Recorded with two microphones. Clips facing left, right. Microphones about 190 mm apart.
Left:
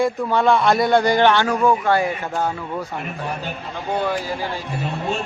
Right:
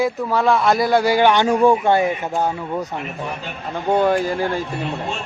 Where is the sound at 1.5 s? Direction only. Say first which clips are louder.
Right 3 dB; 30° right (ahead or behind).